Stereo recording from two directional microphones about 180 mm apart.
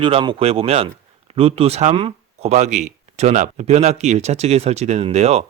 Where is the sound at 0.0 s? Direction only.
30° right (ahead or behind).